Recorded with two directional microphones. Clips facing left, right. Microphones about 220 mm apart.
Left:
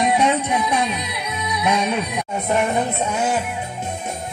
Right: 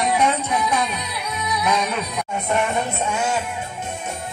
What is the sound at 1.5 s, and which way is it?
Music, 30° left (ahead or behind).